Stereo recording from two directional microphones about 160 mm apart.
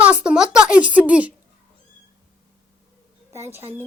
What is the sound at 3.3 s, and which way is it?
Speech, 15° right (ahead or behind).